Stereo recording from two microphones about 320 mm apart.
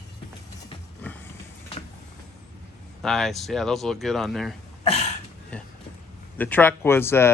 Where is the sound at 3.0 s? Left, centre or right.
Centre.